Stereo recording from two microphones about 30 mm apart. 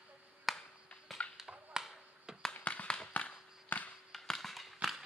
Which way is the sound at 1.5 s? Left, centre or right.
Right.